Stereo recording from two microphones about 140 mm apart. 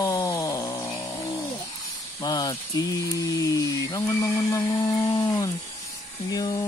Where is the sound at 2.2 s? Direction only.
30° left (ahead or behind).